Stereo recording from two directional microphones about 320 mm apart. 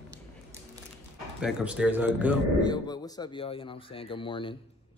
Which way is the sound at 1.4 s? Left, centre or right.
Centre.